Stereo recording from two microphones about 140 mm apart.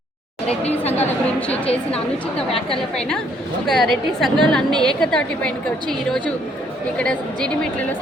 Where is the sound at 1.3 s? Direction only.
10° left (ahead or behind).